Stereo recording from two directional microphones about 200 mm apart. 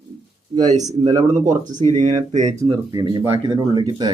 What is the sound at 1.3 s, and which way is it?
Speech, 35° right (ahead or behind).